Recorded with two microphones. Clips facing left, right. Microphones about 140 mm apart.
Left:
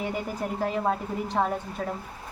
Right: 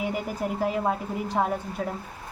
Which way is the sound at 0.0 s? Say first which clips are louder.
Right 2 dB; 5° right (ahead or behind).